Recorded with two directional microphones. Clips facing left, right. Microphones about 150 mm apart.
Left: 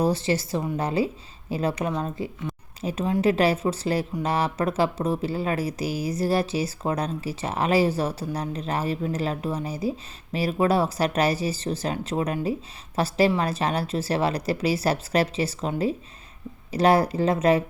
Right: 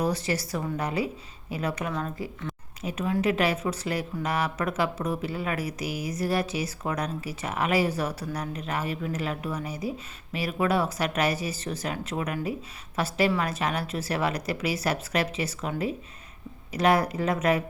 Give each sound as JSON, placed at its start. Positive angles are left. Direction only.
{"t": 0.0, "sound": "a woman's voice", "side_deg": 25}
{"t": 16.7, "sound": "speech", "side_deg": 30}